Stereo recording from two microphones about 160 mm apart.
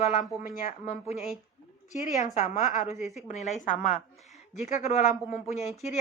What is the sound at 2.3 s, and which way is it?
Speech, 50° left (ahead or behind).